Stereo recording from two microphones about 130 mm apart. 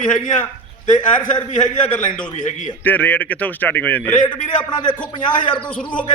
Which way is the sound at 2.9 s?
15° left (ahead or behind).